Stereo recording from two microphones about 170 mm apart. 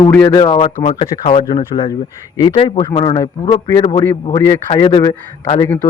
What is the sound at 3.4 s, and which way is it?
Speech, 20° left (ahead or behind).